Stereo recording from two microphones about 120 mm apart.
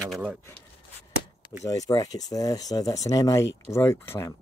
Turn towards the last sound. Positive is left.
turn(degrees=20)  # may be behind; listen again after turning